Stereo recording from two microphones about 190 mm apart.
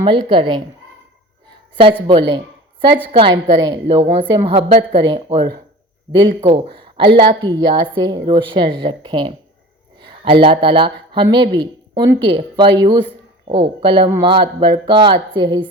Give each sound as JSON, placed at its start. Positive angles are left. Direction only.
{"t": 0.0, "sound": "a woman's voice", "side_deg": -25}
{"t": 1.7, "sound": "speech", "side_deg": -25}
{"t": 3.1, "sound": "a woman's voice", "side_deg": -25}